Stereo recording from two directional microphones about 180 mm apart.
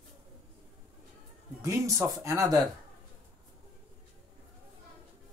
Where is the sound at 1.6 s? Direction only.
15° right (ahead or behind).